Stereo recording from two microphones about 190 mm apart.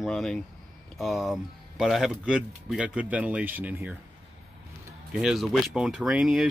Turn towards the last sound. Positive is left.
turn(degrees=0)  # may be behind; listen again after turning